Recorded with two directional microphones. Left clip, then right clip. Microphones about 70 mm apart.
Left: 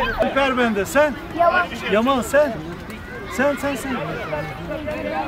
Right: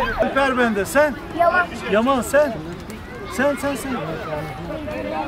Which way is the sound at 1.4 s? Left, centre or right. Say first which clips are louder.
Even; left.